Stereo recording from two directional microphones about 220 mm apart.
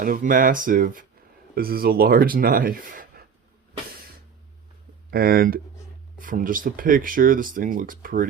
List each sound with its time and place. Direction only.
0.0 s speech: 40° right (ahead or behind)
5.1 s speech: 45° right (ahead or behind)